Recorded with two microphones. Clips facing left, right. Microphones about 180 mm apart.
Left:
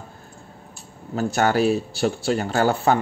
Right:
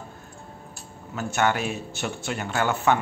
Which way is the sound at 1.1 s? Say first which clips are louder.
Left 4 dB; 35° left (ahead or behind).